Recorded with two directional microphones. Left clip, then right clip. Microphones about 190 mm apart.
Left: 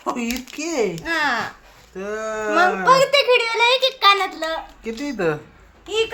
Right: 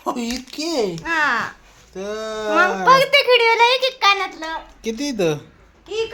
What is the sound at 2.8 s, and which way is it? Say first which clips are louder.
A child's voice: right 3 dB; 55° right (ahead or behind).